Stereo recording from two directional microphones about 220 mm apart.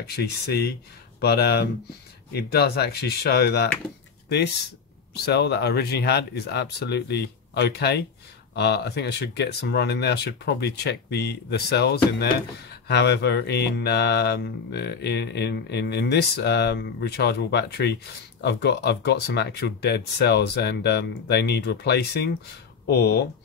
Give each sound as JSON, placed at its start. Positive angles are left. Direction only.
{"t": 0.0, "sound": "mantra", "side_deg": 45}
{"t": 5.1, "sound": "mantra", "side_deg": 50}